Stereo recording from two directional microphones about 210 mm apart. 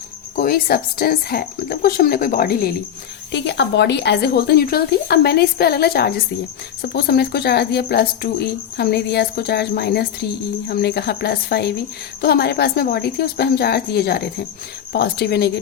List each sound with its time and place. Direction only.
0.3 s speech: 45° left (ahead or behind)
3.3 s speech: 55° left (ahead or behind)